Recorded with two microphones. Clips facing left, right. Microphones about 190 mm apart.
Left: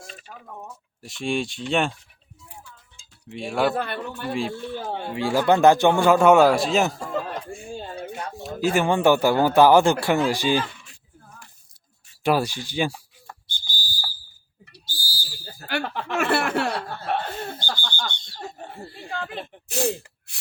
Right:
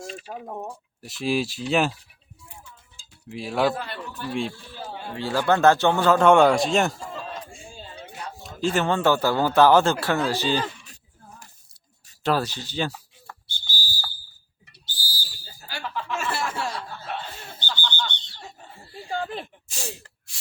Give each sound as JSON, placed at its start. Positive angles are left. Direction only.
{"t": 0.3, "sound": "speech", "side_deg": -35}
{"t": 1.0, "sound": "speech", "side_deg": 0}
{"t": 3.2, "sound": "speech", "side_deg": 0}
{"t": 3.8, "sound": "a man's voice", "side_deg": 60}
{"t": 5.1, "sound": "speech", "side_deg": 15}
{"t": 7.0, "sound": "a sound", "side_deg": 60}
{"t": 8.4, "sound": "speech", "side_deg": 10}
{"t": 12.2, "sound": "whistle", "side_deg": 10}
{"t": 14.8, "sound": "owl", "side_deg": 10}
{"t": 15.5, "sound": "chuckle", "side_deg": 65}
{"t": 17.6, "sound": "a sound", "side_deg": 10}
{"t": 18.3, "sound": "a sound", "side_deg": 60}
{"t": 19.6, "sound": "speech", "side_deg": 60}
{"t": 20.3, "sound": "a sound", "side_deg": 60}